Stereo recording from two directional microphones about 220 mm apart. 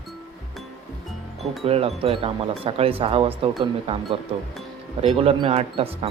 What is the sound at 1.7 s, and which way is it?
Speech, 25° right (ahead or behind).